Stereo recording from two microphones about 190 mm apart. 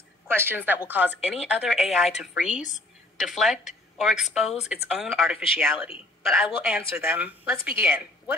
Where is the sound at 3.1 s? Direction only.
Centre (ahead or behind).